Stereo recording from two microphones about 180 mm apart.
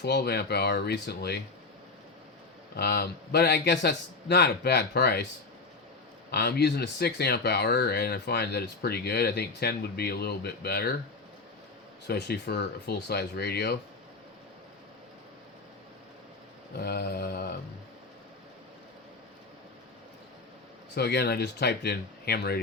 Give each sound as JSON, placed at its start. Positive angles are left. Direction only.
{"t": 0.0, "sound": "speech", "side_deg": 65}
{"t": 2.7, "sound": "speech", "side_deg": 65}
{"t": 6.3, "sound": "speech", "side_deg": 65}
{"t": 12.0, "sound": "speech", "side_deg": 65}
{"t": 16.7, "sound": "speech", "side_deg": 60}
{"t": 20.9, "sound": "speech", "side_deg": 65}